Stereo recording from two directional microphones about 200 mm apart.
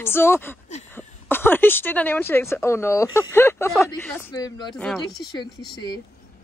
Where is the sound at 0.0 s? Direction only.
10° left (ahead or behind).